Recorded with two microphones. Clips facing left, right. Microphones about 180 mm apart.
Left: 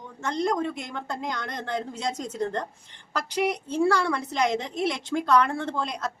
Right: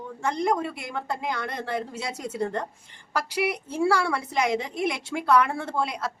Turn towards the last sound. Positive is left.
turn(degrees=-10)  # may be behind; listen again after turning